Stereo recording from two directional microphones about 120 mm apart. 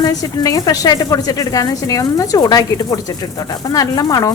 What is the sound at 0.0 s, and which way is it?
A woman's voice, 30° left (ahead or behind).